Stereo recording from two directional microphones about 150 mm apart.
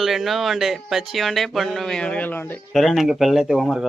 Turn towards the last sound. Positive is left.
turn(degrees=0)  # may be behind; listen again after turning